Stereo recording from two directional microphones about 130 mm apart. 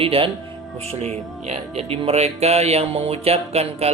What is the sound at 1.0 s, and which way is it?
Speech, 55° right (ahead or behind).